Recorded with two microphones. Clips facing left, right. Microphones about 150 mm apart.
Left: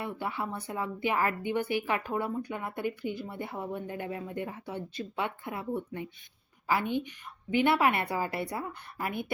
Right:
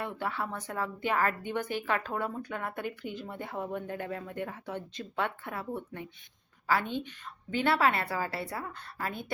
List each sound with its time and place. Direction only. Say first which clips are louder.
0.0 s speech: even; 15° left (ahead or behind)